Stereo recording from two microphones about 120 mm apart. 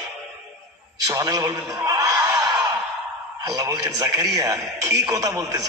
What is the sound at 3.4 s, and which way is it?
A man's voice, 30° right (ahead or behind).